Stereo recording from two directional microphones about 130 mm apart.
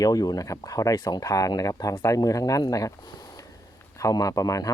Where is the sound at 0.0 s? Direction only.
30° left (ahead or behind).